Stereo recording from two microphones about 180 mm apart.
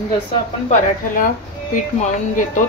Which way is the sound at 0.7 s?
45° left (ahead or behind).